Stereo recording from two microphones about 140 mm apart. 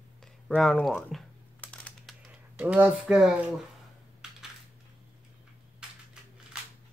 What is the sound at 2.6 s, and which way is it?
Speech, 10° right (ahead or behind).